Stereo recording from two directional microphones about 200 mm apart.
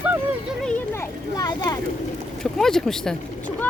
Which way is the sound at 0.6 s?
10° left (ahead or behind).